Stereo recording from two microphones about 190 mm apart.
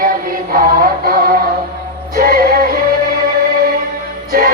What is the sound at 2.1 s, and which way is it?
Music, 50° right (ahead or behind).